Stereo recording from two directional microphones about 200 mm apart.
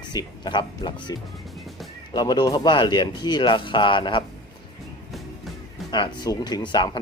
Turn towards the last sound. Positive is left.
turn(degrees=20)  # may be behind; listen again after turning